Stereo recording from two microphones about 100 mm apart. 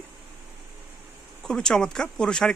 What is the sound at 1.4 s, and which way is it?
Speech, 5° left (ahead or behind).